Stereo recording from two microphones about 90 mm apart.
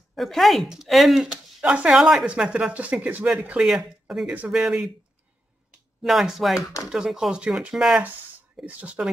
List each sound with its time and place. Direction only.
0.1 s speech: centre (ahead or behind); by 3.3 s 15° right (ahead or behind)
3.6 s speech: 5° right (ahead or behind)
6.0 s speech: 5° right (ahead or behind)
8.6 s speech: 15° right (ahead or behind)